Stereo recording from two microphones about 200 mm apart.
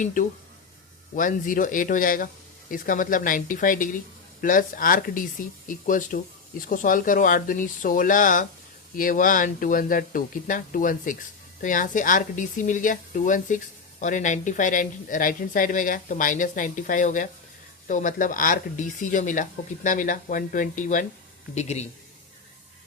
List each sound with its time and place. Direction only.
0.0 s speech: 40° left (ahead or behind)